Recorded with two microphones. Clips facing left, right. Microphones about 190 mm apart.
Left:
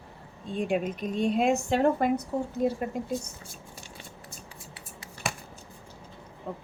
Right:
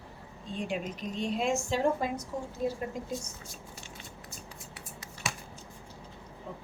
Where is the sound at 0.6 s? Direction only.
55° left (ahead or behind).